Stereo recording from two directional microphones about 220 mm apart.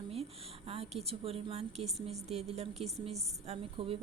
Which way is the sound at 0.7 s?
25° right (ahead or behind).